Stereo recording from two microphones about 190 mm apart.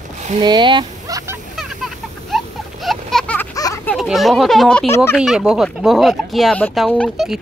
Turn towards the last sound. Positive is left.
turn(degrees=5)  # may be behind; listen again after turning